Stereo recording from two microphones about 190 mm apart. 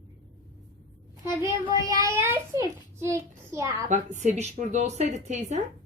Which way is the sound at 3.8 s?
40° right (ahead or behind).